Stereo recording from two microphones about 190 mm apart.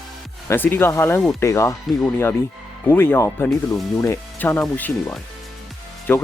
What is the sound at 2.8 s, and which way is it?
Speech, 10° left (ahead or behind).